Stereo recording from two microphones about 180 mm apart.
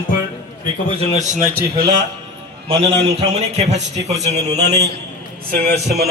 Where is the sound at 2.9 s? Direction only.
35° right (ahead or behind).